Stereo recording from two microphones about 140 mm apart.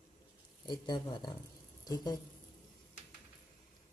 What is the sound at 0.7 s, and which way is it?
Speech, 35° left (ahead or behind).